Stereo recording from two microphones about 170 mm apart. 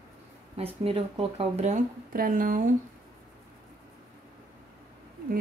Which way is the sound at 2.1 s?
55° right (ahead or behind).